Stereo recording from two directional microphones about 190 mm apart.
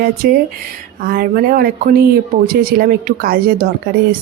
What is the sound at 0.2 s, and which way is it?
Speech, 55° right (ahead or behind).